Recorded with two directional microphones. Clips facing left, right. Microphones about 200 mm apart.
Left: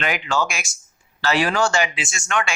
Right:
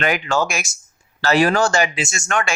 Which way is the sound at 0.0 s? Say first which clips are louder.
Right 3 dB; 45° right (ahead or behind).